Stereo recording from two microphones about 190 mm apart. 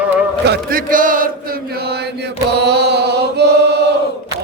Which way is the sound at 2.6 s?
60° right (ahead or behind).